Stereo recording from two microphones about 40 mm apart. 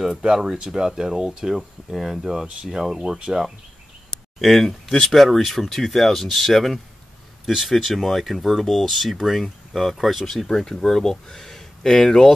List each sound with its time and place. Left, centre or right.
0.1 s speech: centre
4.4 s speech: centre
10.3 s speech: centre